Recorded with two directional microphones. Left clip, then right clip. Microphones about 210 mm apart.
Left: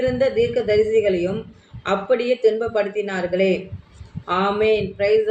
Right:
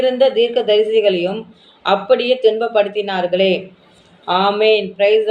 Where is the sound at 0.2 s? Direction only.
20° left (ahead or behind).